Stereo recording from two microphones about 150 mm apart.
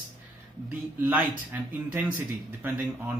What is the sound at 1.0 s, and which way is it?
Speech, 10° right (ahead or behind).